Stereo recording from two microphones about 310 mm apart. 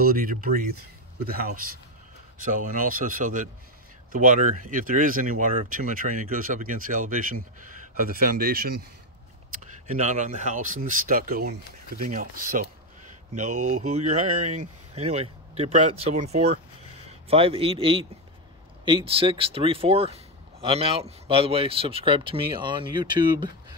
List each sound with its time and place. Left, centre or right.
0.0 s speech: right